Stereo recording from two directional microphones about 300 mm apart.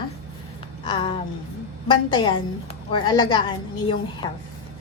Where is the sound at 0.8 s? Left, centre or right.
Centre.